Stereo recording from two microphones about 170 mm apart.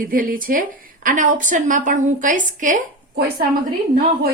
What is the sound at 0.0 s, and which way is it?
A woman's voice, 55° right (ahead or behind).